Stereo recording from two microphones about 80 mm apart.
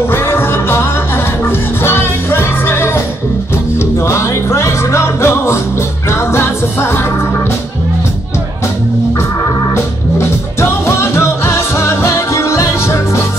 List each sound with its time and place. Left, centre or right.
0.0 s music: left
10.1 s music: left